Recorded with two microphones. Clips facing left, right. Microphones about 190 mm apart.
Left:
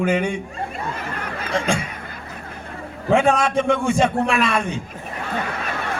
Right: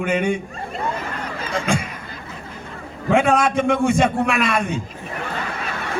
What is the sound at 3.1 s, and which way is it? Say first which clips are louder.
A man's voice: even; 35° left (ahead or behind).